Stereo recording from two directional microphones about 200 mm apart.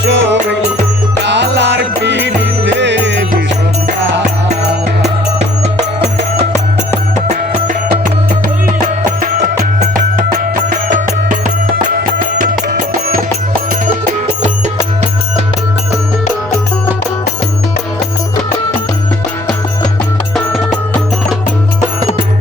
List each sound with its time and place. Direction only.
0.0 s music: 65° right (ahead or behind)
9.9 s music: 45° right (ahead or behind)
20.3 s music: centre (ahead or behind)